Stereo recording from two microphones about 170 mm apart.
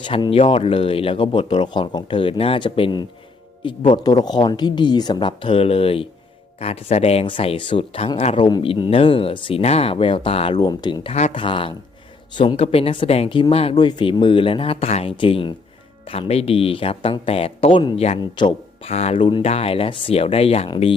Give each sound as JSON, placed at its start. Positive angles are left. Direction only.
{"t": 0.0, "sound": "speech", "side_deg": 30}